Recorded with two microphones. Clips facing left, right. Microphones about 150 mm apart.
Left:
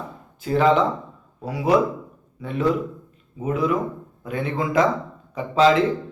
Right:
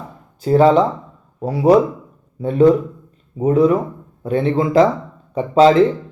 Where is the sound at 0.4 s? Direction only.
35° right (ahead or behind).